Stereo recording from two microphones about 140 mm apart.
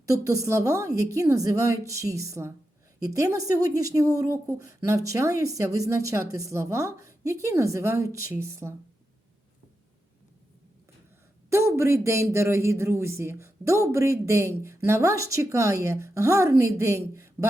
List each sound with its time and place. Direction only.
0.0 s speech: 25° right (ahead or behind)
11.4 s speech: 20° right (ahead or behind)